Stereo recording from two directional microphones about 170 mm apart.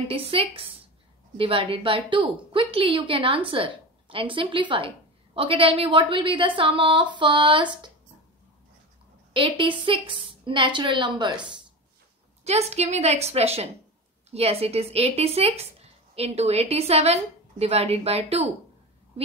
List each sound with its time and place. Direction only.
0.1 s a woman's voice: 30° right (ahead or behind)
9.3 s a woman's voice: 30° right (ahead or behind)
12.4 s a woman's voice: 40° right (ahead or behind)